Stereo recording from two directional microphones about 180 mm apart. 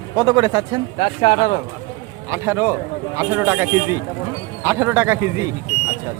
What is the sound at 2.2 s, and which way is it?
Speech, 15° right (ahead or behind).